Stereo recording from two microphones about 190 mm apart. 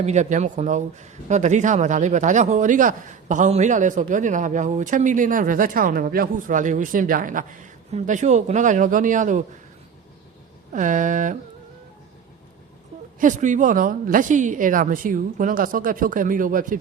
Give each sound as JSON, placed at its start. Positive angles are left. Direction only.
{"t": 0.0, "sound": "speech", "side_deg": -35}
{"t": 10.7, "sound": "a woman's voice", "side_deg": -40}
{"t": 13.1, "sound": "a woman's voice", "side_deg": -40}